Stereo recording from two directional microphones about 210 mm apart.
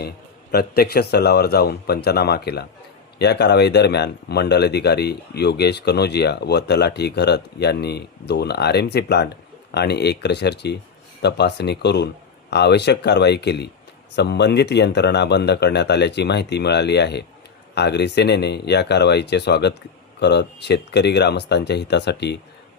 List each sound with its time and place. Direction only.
0.8 s speech: 50° left (ahead or behind)